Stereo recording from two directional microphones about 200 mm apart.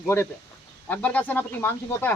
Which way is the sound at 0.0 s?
10° left (ahead or behind).